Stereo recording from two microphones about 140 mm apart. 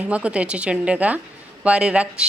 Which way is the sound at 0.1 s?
10° right (ahead or behind).